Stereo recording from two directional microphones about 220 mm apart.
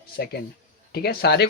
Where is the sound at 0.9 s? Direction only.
45° left (ahead or behind).